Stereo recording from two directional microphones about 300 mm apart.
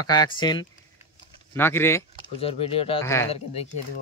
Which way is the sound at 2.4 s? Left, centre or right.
Centre.